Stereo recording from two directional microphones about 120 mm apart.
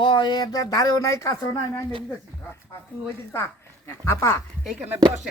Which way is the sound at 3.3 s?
20° left (ahead or behind).